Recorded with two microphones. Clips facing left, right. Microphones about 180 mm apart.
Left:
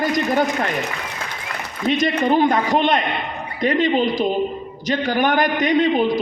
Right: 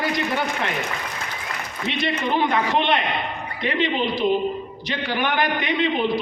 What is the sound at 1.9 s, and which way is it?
A man's voice, 45° left (ahead or behind).